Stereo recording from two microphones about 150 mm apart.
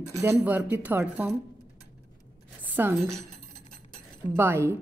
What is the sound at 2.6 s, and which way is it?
Cutlery, 10° right (ahead or behind).